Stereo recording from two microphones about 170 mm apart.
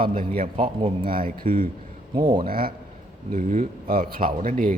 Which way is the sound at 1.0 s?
60° right (ahead or behind).